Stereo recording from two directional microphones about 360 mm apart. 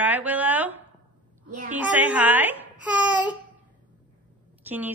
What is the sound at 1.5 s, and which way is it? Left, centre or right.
Speech, right.